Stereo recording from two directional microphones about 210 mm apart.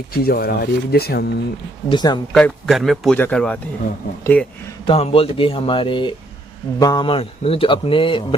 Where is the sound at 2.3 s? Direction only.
Centre (ahead or behind).